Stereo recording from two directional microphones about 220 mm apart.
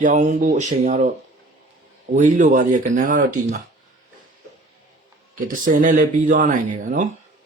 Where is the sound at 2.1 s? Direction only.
35° right (ahead or behind).